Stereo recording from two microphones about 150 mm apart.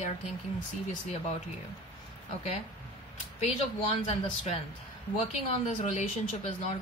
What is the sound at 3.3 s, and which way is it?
Speech, 50° left (ahead or behind).